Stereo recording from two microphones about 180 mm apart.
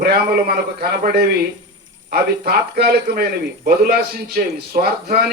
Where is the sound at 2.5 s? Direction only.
65° right (ahead or behind).